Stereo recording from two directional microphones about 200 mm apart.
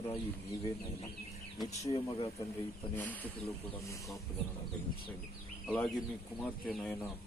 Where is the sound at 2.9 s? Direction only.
10° left (ahead or behind).